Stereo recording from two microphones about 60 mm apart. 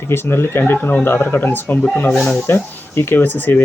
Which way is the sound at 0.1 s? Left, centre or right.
Left.